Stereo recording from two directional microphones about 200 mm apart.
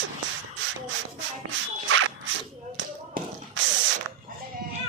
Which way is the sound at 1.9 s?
90° right.